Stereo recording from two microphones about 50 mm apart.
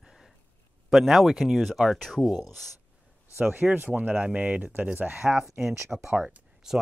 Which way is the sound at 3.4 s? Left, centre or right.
Right.